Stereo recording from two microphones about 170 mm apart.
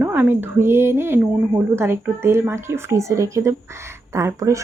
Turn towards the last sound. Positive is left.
turn(degrees=-20)  # may be behind; listen again after turning